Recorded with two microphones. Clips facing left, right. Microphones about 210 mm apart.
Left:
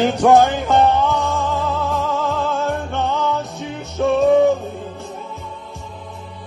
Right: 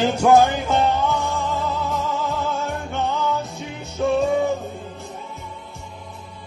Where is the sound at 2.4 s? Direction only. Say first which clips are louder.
Left 4 dB; 55° left (ahead or behind).